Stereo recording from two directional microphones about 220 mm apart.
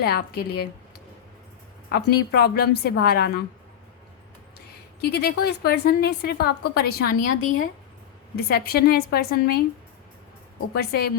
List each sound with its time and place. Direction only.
0.0 s a woman's voice: 45° left (ahead or behind)
1.9 s a woman's voice: 50° left (ahead or behind)
4.9 s a woman's voice: 45° left (ahead or behind)
10.8 s a woman's voice: 45° left (ahead or behind)